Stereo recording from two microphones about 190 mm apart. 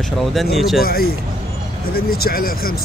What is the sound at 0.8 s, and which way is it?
Speech, 50° left (ahead or behind).